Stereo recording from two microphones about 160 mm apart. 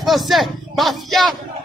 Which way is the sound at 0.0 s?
Centre (ahead or behind).